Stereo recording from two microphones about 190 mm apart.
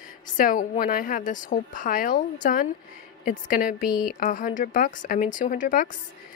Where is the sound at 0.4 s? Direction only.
45° left (ahead or behind).